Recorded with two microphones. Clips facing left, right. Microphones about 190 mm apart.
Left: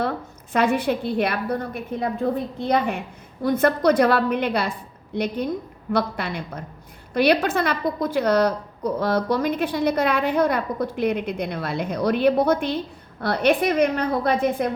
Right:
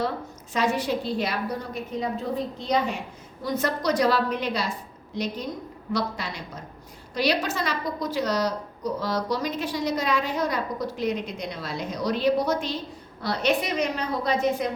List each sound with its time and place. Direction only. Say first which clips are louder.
0.5 s a woman's voice: left 4 dB; 55° left (ahead or behind)